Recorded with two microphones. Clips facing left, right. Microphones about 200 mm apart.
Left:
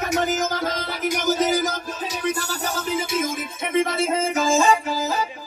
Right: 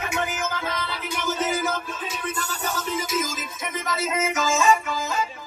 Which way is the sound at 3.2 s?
60° left (ahead or behind).